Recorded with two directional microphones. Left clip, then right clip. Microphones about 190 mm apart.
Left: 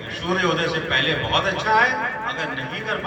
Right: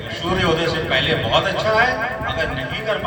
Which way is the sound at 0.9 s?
30° right (ahead or behind).